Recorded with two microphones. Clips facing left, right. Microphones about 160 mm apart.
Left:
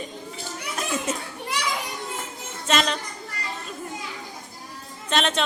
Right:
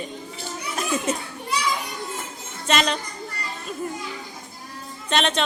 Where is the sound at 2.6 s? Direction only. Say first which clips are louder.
Right 1 dB; centre (ahead or behind).